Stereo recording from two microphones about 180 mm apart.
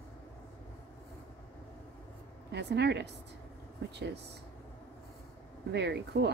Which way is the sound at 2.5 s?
70° right (ahead or behind).